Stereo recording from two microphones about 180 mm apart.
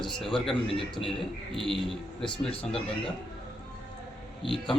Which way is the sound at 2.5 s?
30° left (ahead or behind).